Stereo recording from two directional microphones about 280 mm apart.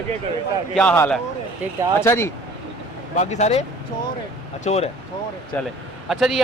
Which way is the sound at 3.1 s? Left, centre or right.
Left.